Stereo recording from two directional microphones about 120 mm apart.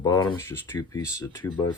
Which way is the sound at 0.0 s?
35° left (ahead or behind).